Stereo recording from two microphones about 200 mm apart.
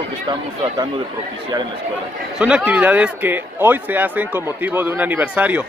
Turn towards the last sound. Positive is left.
turn(degrees=-10)  # may be behind; listen again after turning